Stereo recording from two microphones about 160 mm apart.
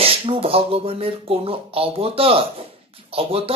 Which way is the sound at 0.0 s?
35° right (ahead or behind).